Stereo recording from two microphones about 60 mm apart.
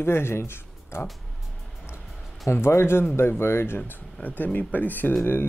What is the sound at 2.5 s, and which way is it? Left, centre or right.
Speech, left.